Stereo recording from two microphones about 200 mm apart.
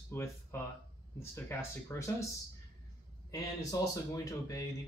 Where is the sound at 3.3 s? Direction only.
15° left (ahead or behind).